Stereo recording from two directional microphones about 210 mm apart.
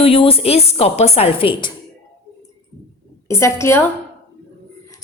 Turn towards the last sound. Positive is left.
turn(degrees=10)  # may be behind; listen again after turning